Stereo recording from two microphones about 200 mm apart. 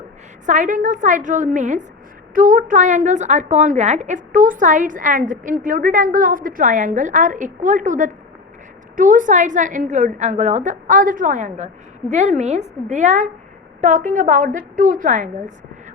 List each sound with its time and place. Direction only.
0.4 s a woman's voice: 40° right (ahead or behind)